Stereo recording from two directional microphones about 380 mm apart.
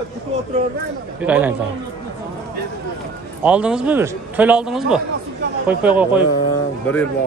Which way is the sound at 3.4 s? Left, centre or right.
Centre.